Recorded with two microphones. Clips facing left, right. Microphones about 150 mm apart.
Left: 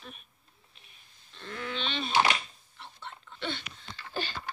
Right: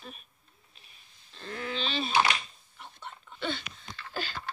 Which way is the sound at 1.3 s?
35° right (ahead or behind).